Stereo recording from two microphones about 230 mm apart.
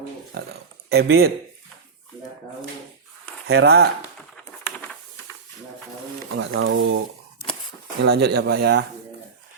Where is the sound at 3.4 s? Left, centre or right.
Right.